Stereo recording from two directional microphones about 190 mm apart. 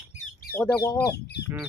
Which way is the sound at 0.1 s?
45° left (ahead or behind).